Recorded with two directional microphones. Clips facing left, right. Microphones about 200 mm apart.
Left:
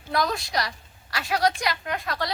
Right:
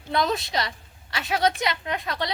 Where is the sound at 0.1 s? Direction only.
25° right (ahead or behind).